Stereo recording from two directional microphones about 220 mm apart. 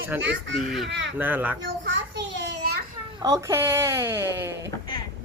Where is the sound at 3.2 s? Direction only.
15° right (ahead or behind).